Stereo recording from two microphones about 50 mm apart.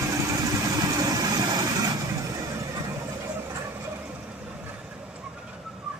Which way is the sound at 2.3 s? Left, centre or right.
Right.